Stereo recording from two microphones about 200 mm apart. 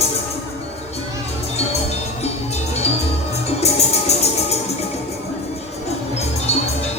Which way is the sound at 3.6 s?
30° left (ahead or behind).